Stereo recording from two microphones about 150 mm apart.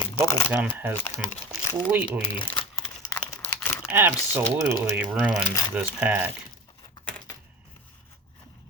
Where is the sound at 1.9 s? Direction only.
10° right (ahead or behind).